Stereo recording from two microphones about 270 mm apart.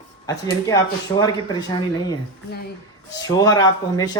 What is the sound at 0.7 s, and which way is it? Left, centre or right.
Speech, centre.